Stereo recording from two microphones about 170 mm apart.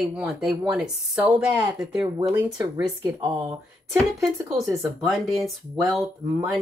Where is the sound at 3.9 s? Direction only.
Centre (ahead or behind).